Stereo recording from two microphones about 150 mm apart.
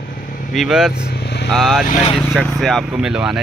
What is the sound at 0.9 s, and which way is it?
Vehicle, 90° left.